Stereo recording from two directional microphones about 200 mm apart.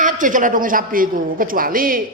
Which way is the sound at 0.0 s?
40° right (ahead or behind).